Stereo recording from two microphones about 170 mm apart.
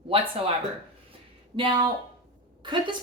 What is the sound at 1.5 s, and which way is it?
Speech, 30° right (ahead or behind).